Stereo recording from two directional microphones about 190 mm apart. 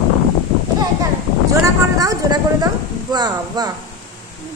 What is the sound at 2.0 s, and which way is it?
A woman's voice, 20° right (ahead or behind).